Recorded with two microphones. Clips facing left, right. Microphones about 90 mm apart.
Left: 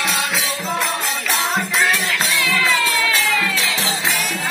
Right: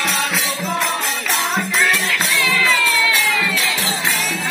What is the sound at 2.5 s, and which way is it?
Crowd, 20° left (ahead or behind).